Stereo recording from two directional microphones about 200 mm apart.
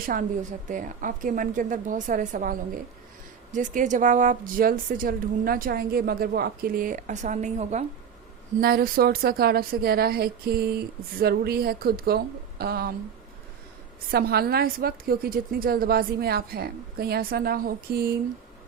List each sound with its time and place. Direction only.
0.0 s a woman's voice: 45° right (ahead or behind)
8.6 s speech: 50° right (ahead or behind)
14.1 s speech: 50° right (ahead or behind)